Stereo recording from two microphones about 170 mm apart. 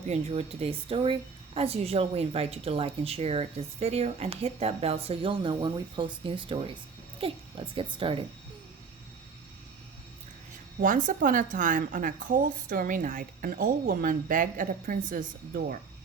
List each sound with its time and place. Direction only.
0.1 s speech: 35° right (ahead or behind)
10.8 s a woman's voice: 50° right (ahead or behind)